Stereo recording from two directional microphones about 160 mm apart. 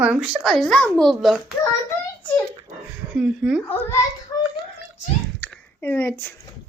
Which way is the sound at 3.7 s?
15° left (ahead or behind).